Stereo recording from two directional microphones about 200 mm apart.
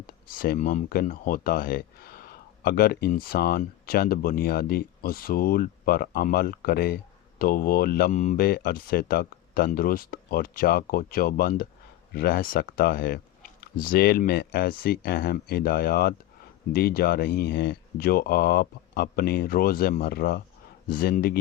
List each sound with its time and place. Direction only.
0.3 s speech: 45° left (ahead or behind)